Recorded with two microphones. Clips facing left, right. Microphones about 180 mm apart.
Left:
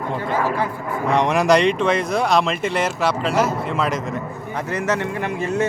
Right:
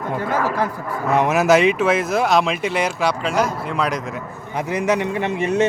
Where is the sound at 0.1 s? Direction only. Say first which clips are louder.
Right 1 dB; 5° right (ahead or behind).